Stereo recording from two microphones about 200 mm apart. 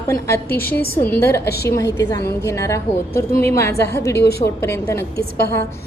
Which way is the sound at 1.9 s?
15° left (ahead or behind).